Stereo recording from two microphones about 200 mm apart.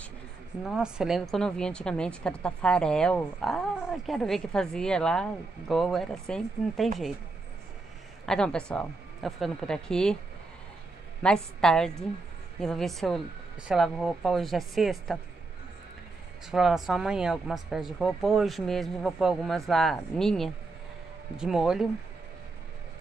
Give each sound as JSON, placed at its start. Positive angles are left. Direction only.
{"t": 0.7, "sound": "a woman's voice", "side_deg": -5}
{"t": 8.3, "sound": "a woman's voice", "side_deg": 5}
{"t": 11.2, "sound": "a woman's voice", "side_deg": 5}
{"t": 16.4, "sound": "a woman's voice", "side_deg": 0}